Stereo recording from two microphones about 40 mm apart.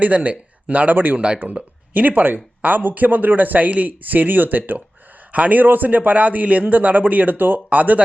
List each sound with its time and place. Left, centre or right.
0.0 s a man's voice: right